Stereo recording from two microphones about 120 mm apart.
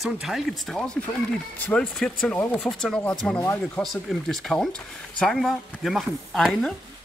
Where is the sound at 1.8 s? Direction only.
5° left (ahead or behind).